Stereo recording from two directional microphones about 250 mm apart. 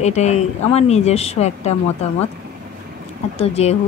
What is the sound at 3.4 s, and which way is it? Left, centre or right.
Speech, left.